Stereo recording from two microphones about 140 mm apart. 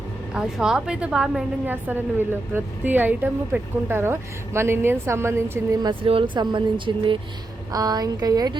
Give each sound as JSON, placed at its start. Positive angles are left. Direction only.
{"t": 0.3, "sound": "a woman's voice", "side_deg": -5}
{"t": 5.8, "sound": "speech", "side_deg": -40}